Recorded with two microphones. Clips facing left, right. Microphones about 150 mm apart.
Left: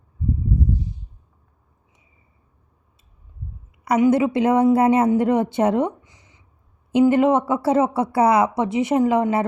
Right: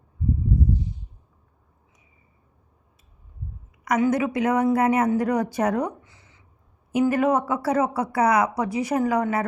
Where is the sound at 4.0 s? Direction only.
25° left (ahead or behind).